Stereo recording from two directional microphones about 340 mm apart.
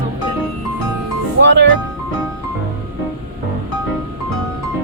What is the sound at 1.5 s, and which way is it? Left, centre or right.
Music, right.